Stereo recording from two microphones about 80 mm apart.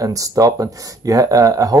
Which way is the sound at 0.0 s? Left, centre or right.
Right.